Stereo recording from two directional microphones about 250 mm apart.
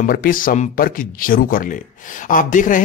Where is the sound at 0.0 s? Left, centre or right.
Left.